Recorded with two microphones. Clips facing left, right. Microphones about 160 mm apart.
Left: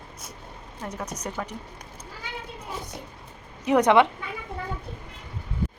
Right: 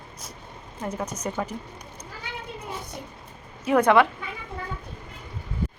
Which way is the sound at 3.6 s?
20° left (ahead or behind).